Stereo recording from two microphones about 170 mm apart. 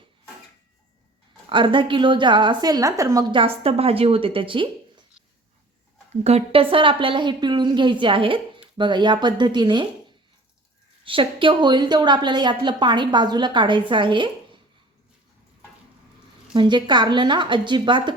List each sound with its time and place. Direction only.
1.5 s a woman's voice: 30° right (ahead or behind)
6.2 s a woman's voice: 35° right (ahead or behind)
11.0 s a woman's voice: 30° right (ahead or behind)
16.6 s a woman's voice: 25° right (ahead or behind)